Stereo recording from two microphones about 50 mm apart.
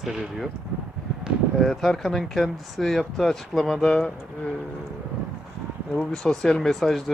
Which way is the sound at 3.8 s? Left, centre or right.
Left.